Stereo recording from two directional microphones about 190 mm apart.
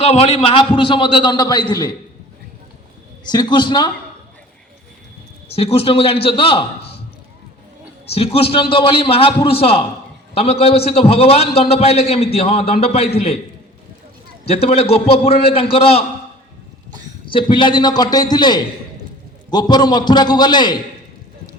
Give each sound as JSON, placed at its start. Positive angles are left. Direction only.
{"t": 0.0, "sound": "a man's voice", "side_deg": 35}
{"t": 3.2, "sound": "a man's voice", "side_deg": 25}
{"t": 5.5, "sound": "a man's voice", "side_deg": 30}
{"t": 8.1, "sound": "a man's voice", "side_deg": 30}
{"t": 14.4, "sound": "a man's voice", "side_deg": 35}
{"t": 17.2, "sound": "a man's voice", "side_deg": 25}